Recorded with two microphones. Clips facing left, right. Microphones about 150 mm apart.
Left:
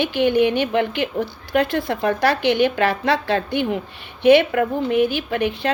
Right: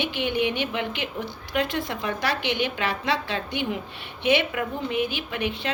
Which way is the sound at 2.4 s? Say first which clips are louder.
Left 9 dB; 45° left (ahead or behind).